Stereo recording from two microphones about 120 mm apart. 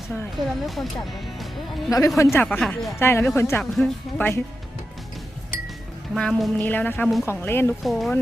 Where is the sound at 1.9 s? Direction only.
30° left (ahead or behind).